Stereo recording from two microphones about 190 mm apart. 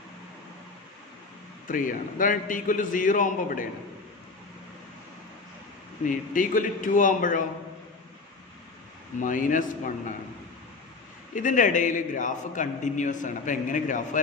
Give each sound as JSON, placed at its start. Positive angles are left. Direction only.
{"t": 1.7, "sound": "a man's voice", "side_deg": 45}
{"t": 6.0, "sound": "a man's voice", "side_deg": 45}
{"t": 9.2, "sound": "a man's voice", "side_deg": 45}
{"t": 11.3, "sound": "a man's voice", "side_deg": 45}